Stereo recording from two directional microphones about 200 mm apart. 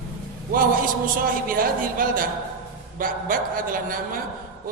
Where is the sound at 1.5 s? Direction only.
45° right (ahead or behind).